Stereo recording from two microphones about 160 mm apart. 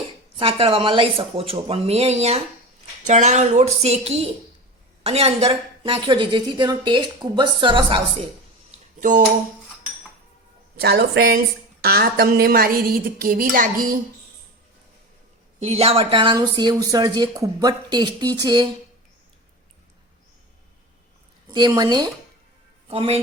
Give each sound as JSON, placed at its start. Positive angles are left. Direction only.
{"t": 0.3, "sound": "a woman's voice", "side_deg": -35}
{"t": 9.0, "sound": "a sound", "side_deg": -55}
{"t": 10.8, "sound": "a woman's voice", "side_deg": -90}
{"t": 15.6, "sound": "speech", "side_deg": -40}
{"t": 21.7, "sound": "speech", "side_deg": -25}
{"t": 22.9, "sound": "a woman's voice", "side_deg": -35}